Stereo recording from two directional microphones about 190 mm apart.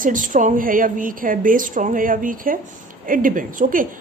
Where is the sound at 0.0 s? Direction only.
45° right (ahead or behind).